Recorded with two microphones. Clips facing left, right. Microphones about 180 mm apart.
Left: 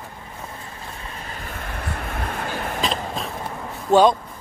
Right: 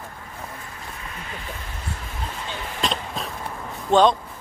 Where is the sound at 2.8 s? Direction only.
Centre (ahead or behind).